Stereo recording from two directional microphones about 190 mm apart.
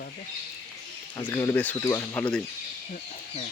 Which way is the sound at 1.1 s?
25° left (ahead or behind).